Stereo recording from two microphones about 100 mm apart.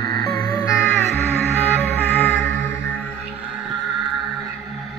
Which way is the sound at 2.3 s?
20° left (ahead or behind).